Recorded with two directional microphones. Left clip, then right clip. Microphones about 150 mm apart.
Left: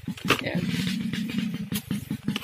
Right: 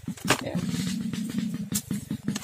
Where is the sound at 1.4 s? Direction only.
40° left (ahead or behind).